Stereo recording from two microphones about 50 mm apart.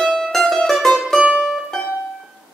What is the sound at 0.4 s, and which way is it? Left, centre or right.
Mandolin, centre.